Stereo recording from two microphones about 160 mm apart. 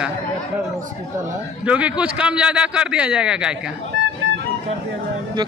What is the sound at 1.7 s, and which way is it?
A man's voice, 5° right (ahead or behind).